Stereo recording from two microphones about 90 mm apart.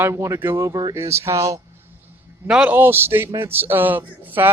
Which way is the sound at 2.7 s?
25° right (ahead or behind).